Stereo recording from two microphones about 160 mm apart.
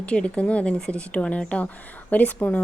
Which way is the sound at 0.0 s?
5° left (ahead or behind).